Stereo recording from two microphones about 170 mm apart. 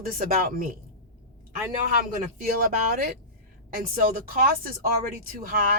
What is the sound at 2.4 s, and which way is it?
Speech, 55° right (ahead or behind).